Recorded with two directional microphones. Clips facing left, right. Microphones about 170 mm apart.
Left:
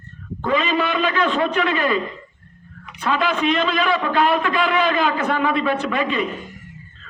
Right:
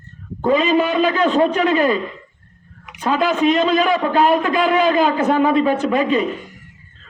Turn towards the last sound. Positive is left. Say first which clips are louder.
# right 5 dB
turn(degrees=-40)  # may be behind; listen again after turning